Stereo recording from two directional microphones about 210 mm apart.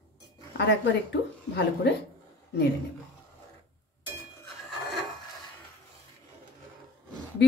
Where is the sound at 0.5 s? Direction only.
55° left (ahead or behind).